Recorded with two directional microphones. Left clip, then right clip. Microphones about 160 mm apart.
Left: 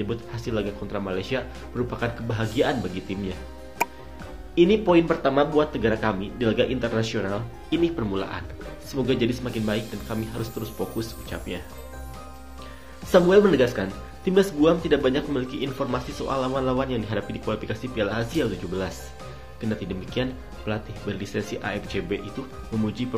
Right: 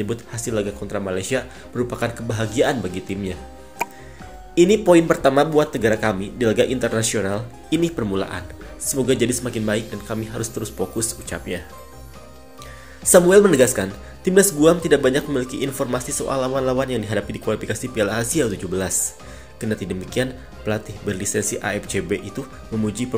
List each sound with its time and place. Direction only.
0.0 s speech: 30° right (ahead or behind)
3.8 s music: centre (ahead or behind)
4.6 s speech: 35° right (ahead or behind)
13.1 s speech: 40° right (ahead or behind)
22.7 s speech: centre (ahead or behind)